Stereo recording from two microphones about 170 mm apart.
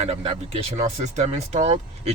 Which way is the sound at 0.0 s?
35° right (ahead or behind).